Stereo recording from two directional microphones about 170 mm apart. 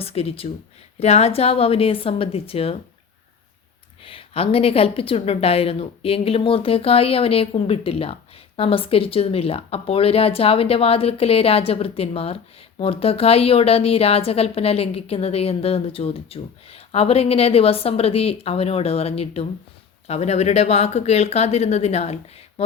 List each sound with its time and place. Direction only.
0.0 s speech: 35° left (ahead or behind)
4.0 s speech: 35° left (ahead or behind)